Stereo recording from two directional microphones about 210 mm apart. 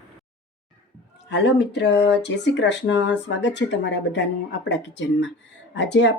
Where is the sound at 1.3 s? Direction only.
55° left (ahead or behind).